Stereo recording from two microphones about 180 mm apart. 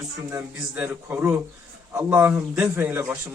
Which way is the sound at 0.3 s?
15° right (ahead or behind).